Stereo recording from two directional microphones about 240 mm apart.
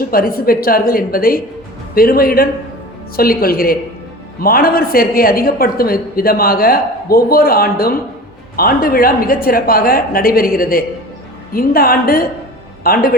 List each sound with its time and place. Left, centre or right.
0.0 s a woman's voice: left